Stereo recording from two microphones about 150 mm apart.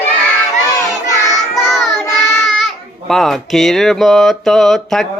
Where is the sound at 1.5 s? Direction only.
Centre (ahead or behind).